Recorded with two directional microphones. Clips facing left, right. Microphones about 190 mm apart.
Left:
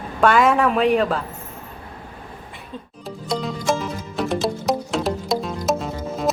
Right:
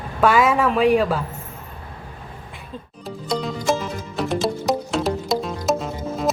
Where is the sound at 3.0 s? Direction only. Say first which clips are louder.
Right 1 dB; centre (ahead or behind).